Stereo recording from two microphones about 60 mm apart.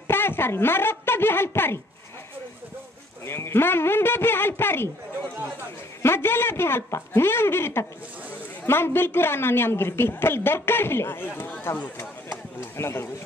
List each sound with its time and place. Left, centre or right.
0.1 s a woman's voice: left
3.3 s a woman's voice: left
6.0 s a woman's voice: left